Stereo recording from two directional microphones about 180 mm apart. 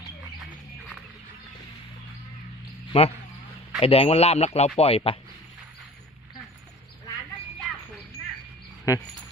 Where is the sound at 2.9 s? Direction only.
35° left (ahead or behind).